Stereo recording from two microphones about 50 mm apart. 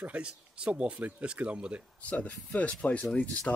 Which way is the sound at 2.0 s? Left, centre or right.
Left.